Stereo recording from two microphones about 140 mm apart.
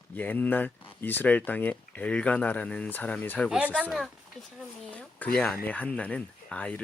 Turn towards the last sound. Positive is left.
turn(degrees=10)  # may be behind; listen again after turning